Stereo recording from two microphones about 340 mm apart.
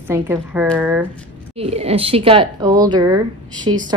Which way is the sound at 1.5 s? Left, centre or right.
Centre.